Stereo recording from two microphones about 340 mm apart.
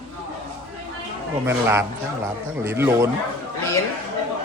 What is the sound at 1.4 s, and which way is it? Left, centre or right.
A man's voice, centre.